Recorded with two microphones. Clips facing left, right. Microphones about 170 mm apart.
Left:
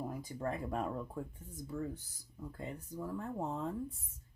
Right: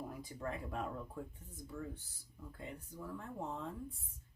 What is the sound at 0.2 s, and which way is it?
Speech, 40° left (ahead or behind).